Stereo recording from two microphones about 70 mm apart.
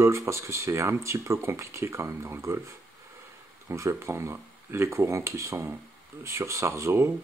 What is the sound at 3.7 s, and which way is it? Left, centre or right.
Speech, right.